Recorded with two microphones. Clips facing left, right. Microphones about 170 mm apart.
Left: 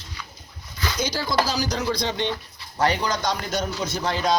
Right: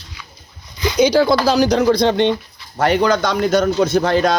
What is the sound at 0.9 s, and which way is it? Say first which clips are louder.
A man's voice: right 12 dB; 65° right (ahead or behind).